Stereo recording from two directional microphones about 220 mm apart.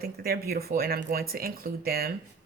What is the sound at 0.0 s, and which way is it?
Speech, 45° right (ahead or behind).